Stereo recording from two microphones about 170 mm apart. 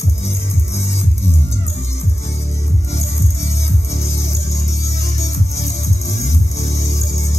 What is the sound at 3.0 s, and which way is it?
Music, 40° left (ahead or behind).